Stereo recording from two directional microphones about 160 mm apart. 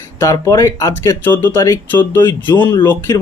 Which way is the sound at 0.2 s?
20° left (ahead or behind).